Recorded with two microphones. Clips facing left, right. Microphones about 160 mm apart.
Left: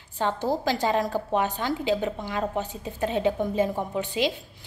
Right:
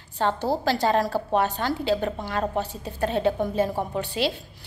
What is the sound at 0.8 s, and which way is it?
A woman's voice, 15° left (ahead or behind).